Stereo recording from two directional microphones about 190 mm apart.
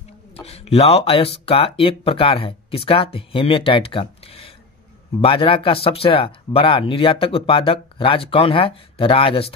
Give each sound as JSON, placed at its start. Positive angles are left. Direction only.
{"t": 0.4, "sound": "speech", "side_deg": 30}